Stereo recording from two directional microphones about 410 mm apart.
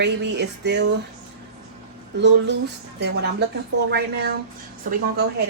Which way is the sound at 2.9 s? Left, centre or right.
Right.